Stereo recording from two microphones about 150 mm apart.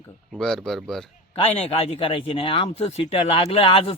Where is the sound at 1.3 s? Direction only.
40° left (ahead or behind).